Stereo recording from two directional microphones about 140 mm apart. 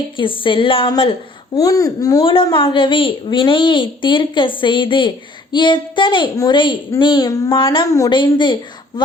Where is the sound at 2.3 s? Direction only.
40° left (ahead or behind).